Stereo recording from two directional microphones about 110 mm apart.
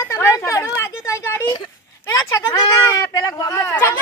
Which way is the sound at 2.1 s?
35° left (ahead or behind).